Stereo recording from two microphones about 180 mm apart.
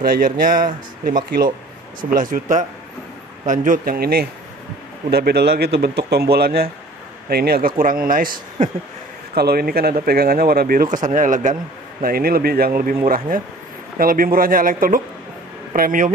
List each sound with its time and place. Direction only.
0.0 s speech: 55° right (ahead or behind)
13.9 s speech: 50° right (ahead or behind)